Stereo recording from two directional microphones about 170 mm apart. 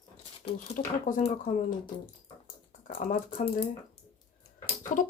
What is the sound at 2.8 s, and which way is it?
Shuffling cards, 50° left (ahead or behind).